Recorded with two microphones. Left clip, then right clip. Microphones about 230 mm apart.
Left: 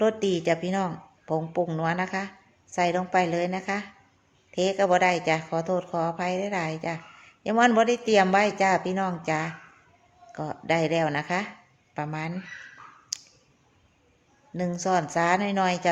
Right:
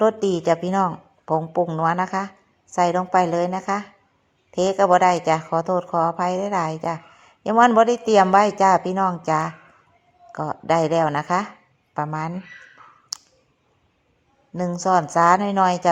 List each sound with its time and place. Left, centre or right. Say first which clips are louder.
0.0 s a woman's voice: right 5 dB; centre
13.1 s clicking: right 3 dB; centre
14.5 s a woman's voice: right 6 dB; centre